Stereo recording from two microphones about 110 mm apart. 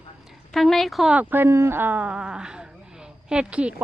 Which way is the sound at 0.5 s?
Centre (ahead or behind).